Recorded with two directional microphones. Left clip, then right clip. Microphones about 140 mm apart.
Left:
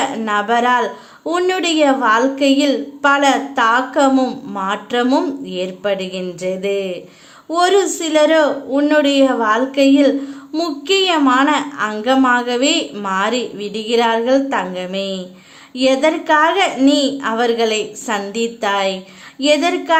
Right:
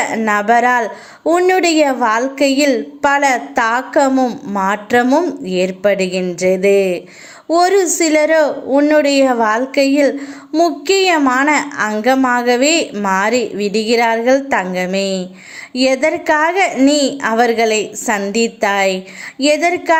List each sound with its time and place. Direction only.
0.3 s a woman's voice: 25° right (ahead or behind)
1.3 s speech: 15° right (ahead or behind)
1.5 s a woman's voice: 30° right (ahead or behind)
4.1 s a woman's voice: 15° right (ahead or behind)
5.0 s speech: 15° right (ahead or behind)
5.5 s a woman's voice: 25° right (ahead or behind)